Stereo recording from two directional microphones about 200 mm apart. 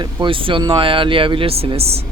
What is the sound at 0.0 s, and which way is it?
Speech, 25° right (ahead or behind).